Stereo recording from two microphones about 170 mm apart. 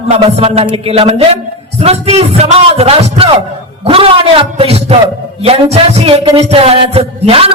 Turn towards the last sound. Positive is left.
turn(degrees=-35)  # may be behind; listen again after turning